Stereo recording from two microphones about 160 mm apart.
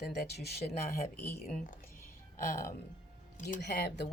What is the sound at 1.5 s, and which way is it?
Speech, 55° left (ahead or behind).